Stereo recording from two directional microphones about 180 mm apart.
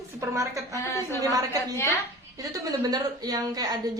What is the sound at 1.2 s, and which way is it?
Speech, 20° right (ahead or behind).